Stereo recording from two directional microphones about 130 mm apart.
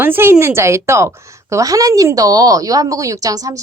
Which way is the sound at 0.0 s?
15° right (ahead or behind).